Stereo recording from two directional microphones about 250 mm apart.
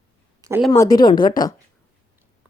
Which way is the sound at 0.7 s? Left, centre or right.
Centre.